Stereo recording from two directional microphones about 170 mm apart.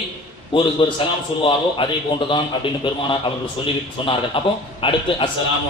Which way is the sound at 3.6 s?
30° left (ahead or behind).